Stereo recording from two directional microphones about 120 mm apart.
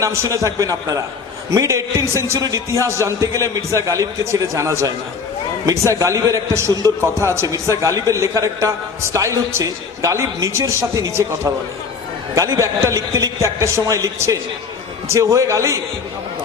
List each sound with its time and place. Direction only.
0.0 s a man's voice: 25° right (ahead or behind)